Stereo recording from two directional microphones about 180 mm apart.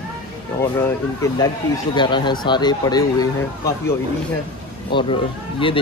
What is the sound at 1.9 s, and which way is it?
Speech, 25° left (ahead or behind).